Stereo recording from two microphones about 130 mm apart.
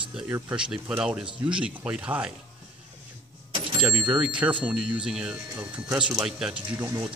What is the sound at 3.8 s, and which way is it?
Speech, 10° right (ahead or behind).